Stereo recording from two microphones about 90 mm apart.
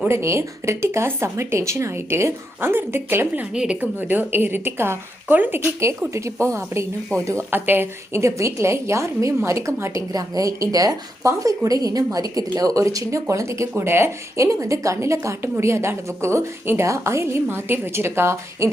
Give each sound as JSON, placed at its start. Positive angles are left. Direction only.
{"t": 0.1, "sound": "speech", "side_deg": -30}
{"t": 3.5, "sound": "a woman's voice", "side_deg": -10}
{"t": 3.8, "sound": "a woman's voice", "side_deg": -20}
{"t": 10.1, "sound": "a woman's voice", "side_deg": -40}